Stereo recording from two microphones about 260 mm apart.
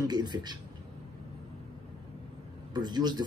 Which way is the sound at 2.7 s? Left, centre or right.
Centre.